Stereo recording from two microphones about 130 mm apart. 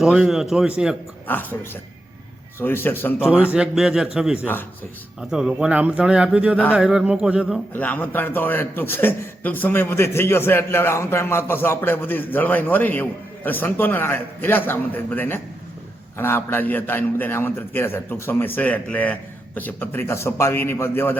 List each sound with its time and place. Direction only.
0.0 s a man's voice: 5° right (ahead or behind)
1.3 s a man's voice: 15° left (ahead or behind)
3.5 s a man's voice: 5° right (ahead or behind)
7.7 s a man's voice: 15° left (ahead or behind)